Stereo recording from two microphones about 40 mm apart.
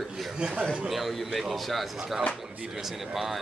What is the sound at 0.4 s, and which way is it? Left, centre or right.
Speech, right.